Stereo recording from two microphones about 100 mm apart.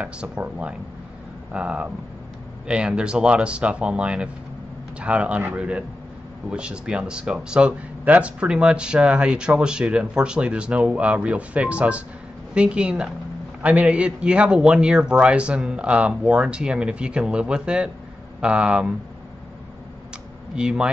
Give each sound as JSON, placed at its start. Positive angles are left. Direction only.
{"t": 0.0, "sound": "speech", "side_deg": -10}
{"t": 20.5, "sound": "speech", "side_deg": -10}